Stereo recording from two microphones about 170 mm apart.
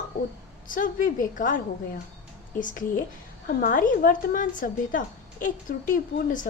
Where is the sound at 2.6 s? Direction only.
50° left (ahead or behind).